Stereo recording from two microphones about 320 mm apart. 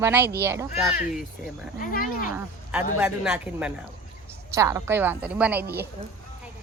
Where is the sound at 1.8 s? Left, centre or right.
Left.